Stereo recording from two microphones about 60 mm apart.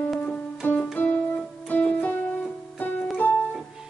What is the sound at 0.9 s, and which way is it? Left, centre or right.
Piano, left.